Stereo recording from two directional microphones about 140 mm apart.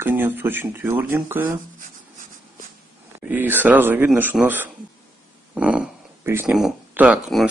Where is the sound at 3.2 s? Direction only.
15° right (ahead or behind).